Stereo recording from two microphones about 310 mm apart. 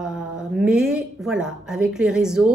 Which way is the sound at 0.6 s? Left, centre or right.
Centre.